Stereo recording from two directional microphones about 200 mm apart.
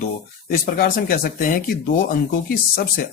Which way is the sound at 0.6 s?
45° left (ahead or behind).